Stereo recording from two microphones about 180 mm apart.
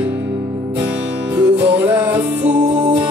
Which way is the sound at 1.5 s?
10° right (ahead or behind).